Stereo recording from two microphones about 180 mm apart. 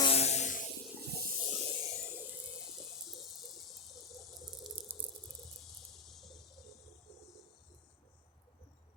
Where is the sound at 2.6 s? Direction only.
Centre (ahead or behind).